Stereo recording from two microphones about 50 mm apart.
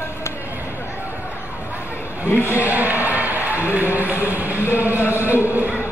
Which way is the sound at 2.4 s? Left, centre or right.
Right.